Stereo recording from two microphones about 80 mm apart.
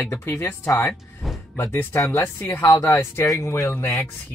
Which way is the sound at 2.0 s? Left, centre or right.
Left.